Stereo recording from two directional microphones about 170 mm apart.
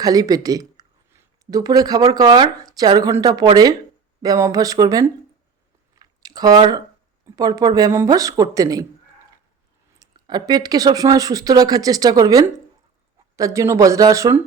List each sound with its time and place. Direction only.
0.0 s a sound: 20° right (ahead or behind)
2.1 s speech: 25° right (ahead or behind)
6.0 s chewing: 20° right (ahead or behind)
7.3 s speech: 20° right (ahead or behind)
10.0 s speech: 25° right (ahead or behind)